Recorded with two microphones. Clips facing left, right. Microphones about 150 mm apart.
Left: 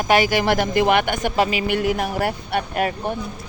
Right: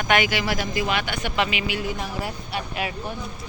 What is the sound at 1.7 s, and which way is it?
Speech, 65° left (ahead or behind).